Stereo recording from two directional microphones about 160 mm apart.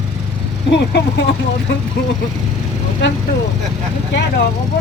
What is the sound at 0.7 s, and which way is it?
Speech, 90° left.